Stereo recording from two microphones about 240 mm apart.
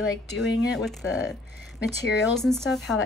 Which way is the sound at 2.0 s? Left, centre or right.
Left.